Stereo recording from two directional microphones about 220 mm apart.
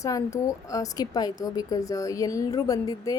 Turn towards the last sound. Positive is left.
turn(degrees=15)  # may be behind; listen again after turning